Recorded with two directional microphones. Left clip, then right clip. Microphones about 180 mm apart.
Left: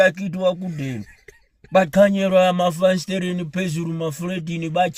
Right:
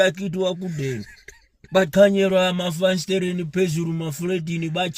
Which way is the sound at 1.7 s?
20° left (ahead or behind).